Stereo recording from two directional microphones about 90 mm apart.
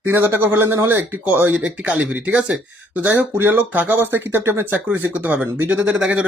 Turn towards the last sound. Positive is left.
turn(degrees=-10)  # may be behind; listen again after turning